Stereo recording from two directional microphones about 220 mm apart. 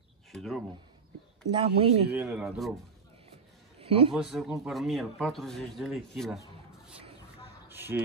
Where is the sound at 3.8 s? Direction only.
25° right (ahead or behind).